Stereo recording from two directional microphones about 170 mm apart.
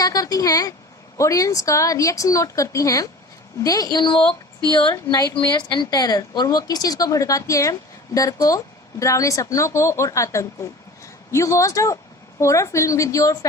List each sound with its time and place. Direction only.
0.0 s a woman's voice: 20° left (ahead or behind)